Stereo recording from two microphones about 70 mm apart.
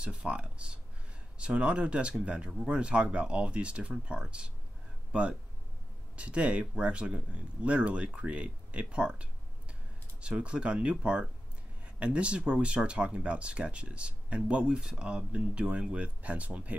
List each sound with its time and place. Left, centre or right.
0.0 s speech: centre